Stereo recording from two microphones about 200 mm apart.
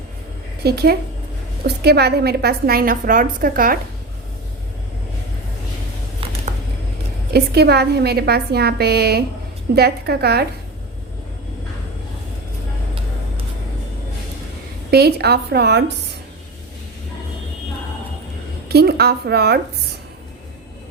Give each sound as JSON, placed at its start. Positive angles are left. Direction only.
{"t": 0.6, "sound": "a woman's voice", "side_deg": -55}
{"t": 7.3, "sound": "a woman's voice", "side_deg": -55}
{"t": 14.8, "sound": "a woman's voice", "side_deg": -55}
{"t": 18.7, "sound": "a woman's voice", "side_deg": -50}